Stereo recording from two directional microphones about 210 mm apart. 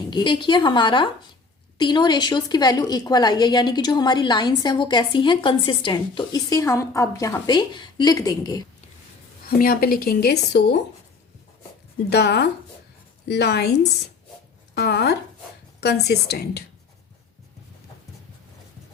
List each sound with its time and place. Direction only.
0.1 s a woman's voice: 20° left (ahead or behind)
9.5 s speech: 45° left (ahead or behind)
12.1 s speech: 50° left (ahead or behind)
14.8 s speech: 50° left (ahead or behind)